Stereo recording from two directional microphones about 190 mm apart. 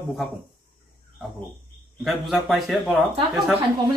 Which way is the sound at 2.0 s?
Centre (ahead or behind).